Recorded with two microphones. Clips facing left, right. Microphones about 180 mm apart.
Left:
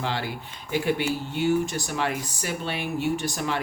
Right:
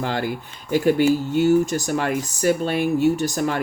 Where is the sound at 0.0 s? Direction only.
45° right (ahead or behind).